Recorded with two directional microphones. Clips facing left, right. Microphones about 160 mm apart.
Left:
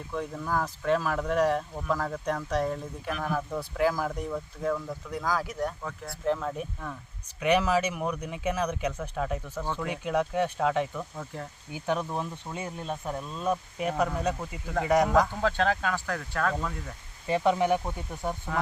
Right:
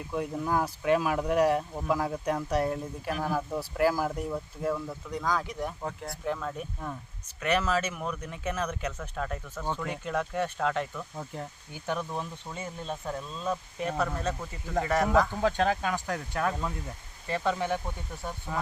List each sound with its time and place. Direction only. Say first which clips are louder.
0.1 s speech: right 2 dB; 10° right (ahead or behind); by 15.3 s 15° left (ahead or behind)
15.4 s speech: even; 15° right (ahead or behind)
17.2 s speech: left 5 dB; 15° left (ahead or behind)